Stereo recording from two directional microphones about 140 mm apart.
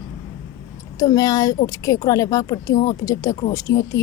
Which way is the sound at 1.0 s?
25° left (ahead or behind).